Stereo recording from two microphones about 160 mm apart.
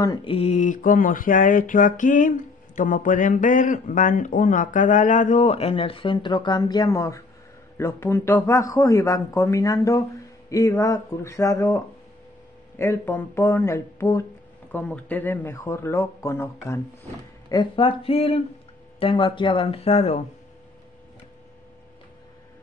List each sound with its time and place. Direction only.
0.0 s a man's voice: 25° left (ahead or behind)
0.3 s a sound: 40° left (ahead or behind); by 7.2 s 20° left (ahead or behind)
7.7 s a man's voice: 15° left (ahead or behind)
17.5 s speech: 30° left (ahead or behind)